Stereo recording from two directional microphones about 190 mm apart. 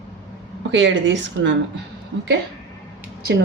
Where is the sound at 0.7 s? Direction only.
75° right (ahead or behind).